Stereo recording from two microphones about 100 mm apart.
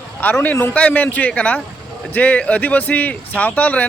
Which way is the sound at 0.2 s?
15° left (ahead or behind).